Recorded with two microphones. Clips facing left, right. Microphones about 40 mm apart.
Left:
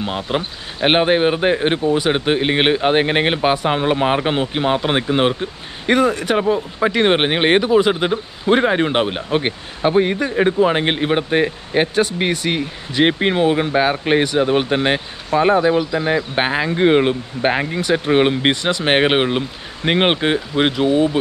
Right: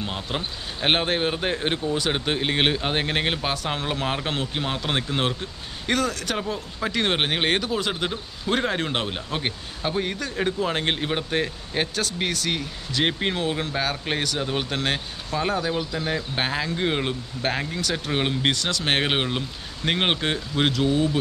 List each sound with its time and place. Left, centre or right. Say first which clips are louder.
0.0 s speech: left 8 dB; left